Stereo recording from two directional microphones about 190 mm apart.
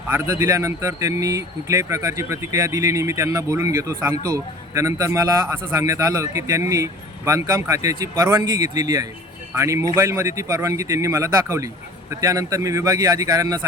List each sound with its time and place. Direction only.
0.1 s a man's voice: 15° right (ahead or behind)